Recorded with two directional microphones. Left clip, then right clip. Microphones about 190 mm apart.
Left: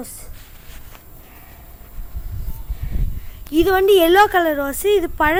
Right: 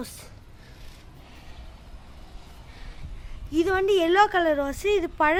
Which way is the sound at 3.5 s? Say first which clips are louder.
Left 8 dB; 20° left (ahead or behind).